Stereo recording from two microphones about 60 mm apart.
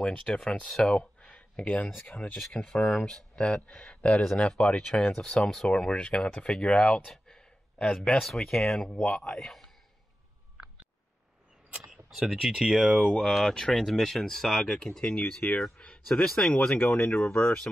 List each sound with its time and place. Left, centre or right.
0.0 s speech: centre
0.8 s a sound: centre
1.6 s speech: left
2.4 s speech: centre
4.8 s speech: centre
7.1 s a sound: centre
7.8 s speech: left; by 9.7 s centre
11.9 s speech: centre
13.1 s speech: centre
15.4 s speech: left
15.8 s a sound: centre
16.3 s speech: centre
16.7 s speech: left